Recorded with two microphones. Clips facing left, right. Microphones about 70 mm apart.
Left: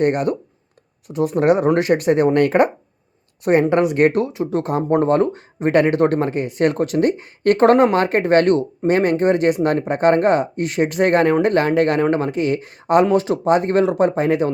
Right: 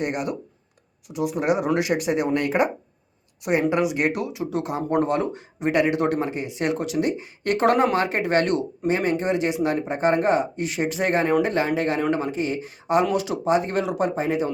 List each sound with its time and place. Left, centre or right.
0.0 s speech: left
8.9 s speech: left
13.1 s speech: left